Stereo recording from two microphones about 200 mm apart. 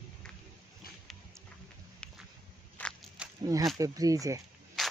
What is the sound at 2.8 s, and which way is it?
Walk, 5° left (ahead or behind).